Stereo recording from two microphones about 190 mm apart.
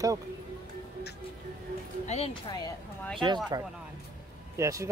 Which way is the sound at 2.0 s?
30° left (ahead or behind).